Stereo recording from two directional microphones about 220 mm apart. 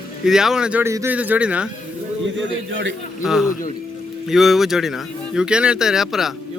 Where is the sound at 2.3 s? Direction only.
55° right (ahead or behind).